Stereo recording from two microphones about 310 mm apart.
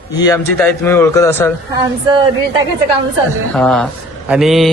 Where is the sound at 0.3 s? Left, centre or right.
Centre.